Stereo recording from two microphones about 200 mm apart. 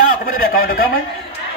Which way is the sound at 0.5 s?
45° left (ahead or behind).